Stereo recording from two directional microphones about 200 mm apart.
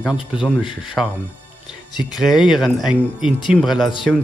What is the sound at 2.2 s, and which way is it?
Speech, centre (ahead or behind).